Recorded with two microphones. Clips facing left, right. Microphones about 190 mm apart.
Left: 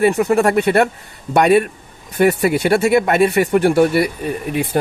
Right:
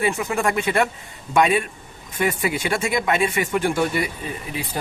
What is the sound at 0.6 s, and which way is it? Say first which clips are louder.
Speech: left 6 dB; 65° left (ahead or behind).